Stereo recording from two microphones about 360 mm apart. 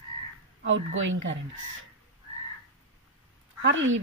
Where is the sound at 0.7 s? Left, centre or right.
Right.